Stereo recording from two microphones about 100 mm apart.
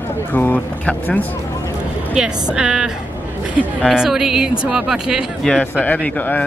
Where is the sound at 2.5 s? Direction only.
5° right (ahead or behind).